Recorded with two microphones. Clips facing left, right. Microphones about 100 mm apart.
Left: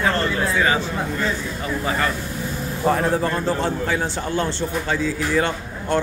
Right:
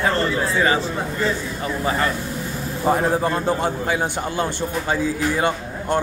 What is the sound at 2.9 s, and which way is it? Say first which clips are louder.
A man's voice: right 1 dB; 20° right (ahead or behind).